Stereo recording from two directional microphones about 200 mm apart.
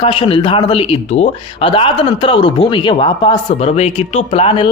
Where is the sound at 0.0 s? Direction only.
30° left (ahead or behind).